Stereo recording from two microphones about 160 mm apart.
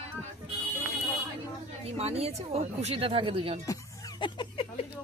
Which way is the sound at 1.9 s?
40° right (ahead or behind).